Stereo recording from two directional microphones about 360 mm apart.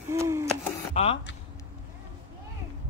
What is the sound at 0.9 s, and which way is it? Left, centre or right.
Speech, centre.